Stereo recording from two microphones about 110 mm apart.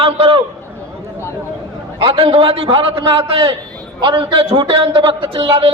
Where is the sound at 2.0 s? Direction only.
55° right (ahead or behind).